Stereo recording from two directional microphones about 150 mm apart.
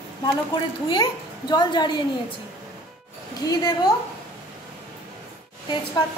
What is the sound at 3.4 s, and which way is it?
Speech, 25° left (ahead or behind).